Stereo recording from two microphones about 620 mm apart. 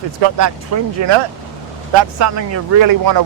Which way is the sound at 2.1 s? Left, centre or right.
Right.